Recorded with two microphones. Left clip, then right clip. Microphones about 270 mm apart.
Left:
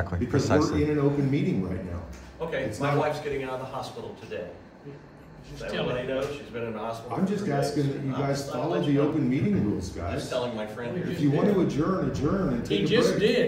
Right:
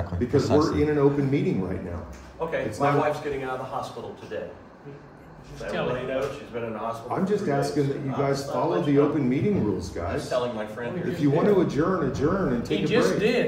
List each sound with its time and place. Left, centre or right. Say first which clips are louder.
0.4 s a man's voice: right 2 dB; centre
0.7 s speech: right 3 dB; centre
5.6 s speech: right 2 dB; centre